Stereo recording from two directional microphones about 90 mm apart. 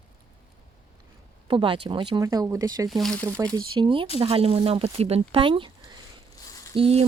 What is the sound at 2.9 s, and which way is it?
Speech, centre (ahead or behind).